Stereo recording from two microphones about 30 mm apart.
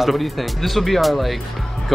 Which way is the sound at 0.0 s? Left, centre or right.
Centre.